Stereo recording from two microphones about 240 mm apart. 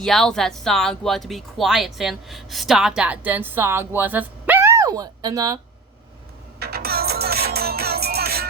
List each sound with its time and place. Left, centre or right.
0.0 s speech: centre
6.6 s music: right